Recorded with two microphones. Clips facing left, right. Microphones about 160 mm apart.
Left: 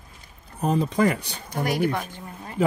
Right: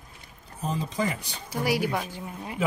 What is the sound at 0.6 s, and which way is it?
Speech, 60° left (ahead or behind).